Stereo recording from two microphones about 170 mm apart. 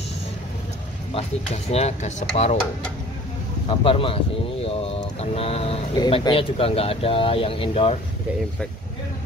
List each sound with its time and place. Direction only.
1.1 s speech: 40° left (ahead or behind)
3.6 s speech: 30° left (ahead or behind)